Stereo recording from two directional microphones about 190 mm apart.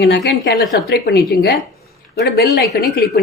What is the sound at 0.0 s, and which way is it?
A woman's voice, 65° left (ahead or behind).